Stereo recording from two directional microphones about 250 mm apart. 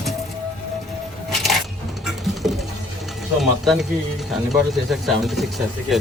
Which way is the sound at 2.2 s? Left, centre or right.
Centre.